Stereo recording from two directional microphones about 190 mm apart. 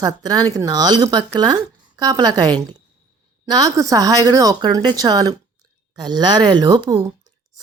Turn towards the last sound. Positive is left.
turn(degrees=-20)  # may be behind; listen again after turning